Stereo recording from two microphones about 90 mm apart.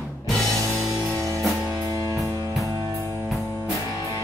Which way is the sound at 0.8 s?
Centre (ahead or behind).